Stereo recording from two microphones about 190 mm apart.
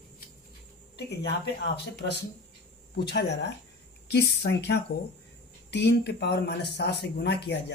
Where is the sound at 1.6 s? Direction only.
60° left (ahead or behind).